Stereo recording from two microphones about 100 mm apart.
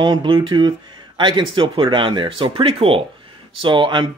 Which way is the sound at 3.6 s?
55° right (ahead or behind).